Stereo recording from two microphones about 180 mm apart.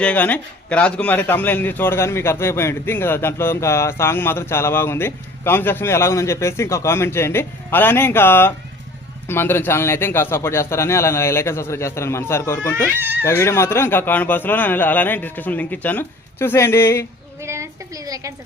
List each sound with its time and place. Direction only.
0.0 s a man's voice: 10° left (ahead or behind)
13.0 s speech: 10° right (ahead or behind)
13.2 s a man's voice: 15° left (ahead or behind)
17.4 s a sound: 15° right (ahead or behind)